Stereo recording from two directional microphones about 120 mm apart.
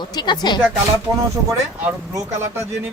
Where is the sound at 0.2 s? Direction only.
40° left (ahead or behind).